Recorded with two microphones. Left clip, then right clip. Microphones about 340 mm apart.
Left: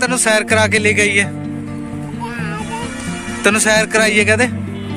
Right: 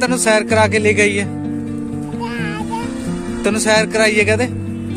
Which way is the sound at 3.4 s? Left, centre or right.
Centre.